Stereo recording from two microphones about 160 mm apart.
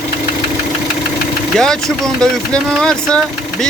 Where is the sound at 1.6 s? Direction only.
5° left (ahead or behind).